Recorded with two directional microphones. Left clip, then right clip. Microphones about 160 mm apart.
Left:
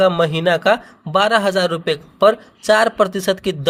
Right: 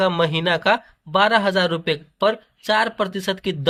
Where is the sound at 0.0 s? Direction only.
30° left (ahead or behind).